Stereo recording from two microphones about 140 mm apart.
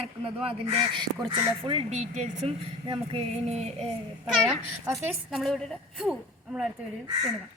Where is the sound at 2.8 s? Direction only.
35° right (ahead or behind).